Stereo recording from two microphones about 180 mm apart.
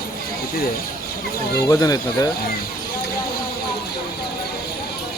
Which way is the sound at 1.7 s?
20° left (ahead or behind).